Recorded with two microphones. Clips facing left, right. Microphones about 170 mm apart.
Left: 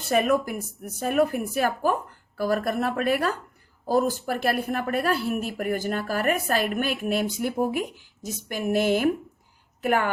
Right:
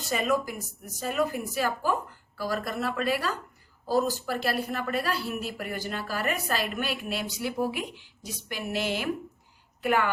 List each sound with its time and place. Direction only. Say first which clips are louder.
0.0 s a woman's voice: left 5 dB; 55° left (ahead or behind)